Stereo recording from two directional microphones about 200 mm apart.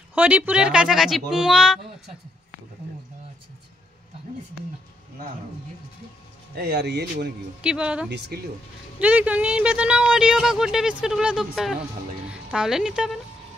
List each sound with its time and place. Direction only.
0.1 s speech: 10° right (ahead or behind)
6.5 s speech: 55° right (ahead or behind)
7.6 s speech: 5° right (ahead or behind)